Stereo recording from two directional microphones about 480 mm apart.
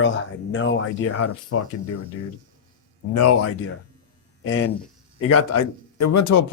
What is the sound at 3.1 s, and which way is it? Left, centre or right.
Speech, left.